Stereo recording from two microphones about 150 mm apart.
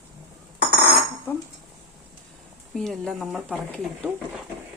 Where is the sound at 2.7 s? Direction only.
5° left (ahead or behind).